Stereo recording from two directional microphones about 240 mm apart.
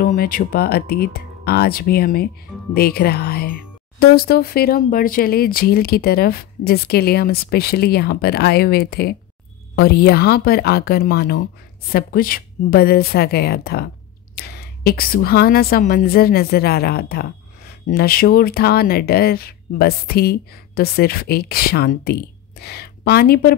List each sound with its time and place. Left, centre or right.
0.0 s a woman's voice: left